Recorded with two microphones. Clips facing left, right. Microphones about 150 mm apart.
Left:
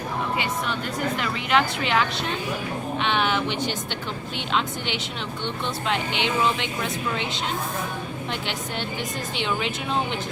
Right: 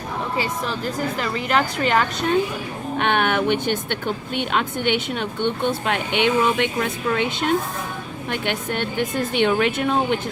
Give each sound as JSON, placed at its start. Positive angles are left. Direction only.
{"t": 0.3, "sound": "speech", "side_deg": -35}
{"t": 3.0, "sound": "a woman's voice", "side_deg": -55}